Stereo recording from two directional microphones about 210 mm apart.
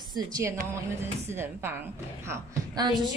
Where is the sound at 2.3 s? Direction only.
20° right (ahead or behind).